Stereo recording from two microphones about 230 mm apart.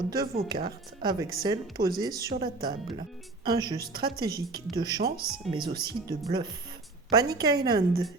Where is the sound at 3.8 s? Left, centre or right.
Right.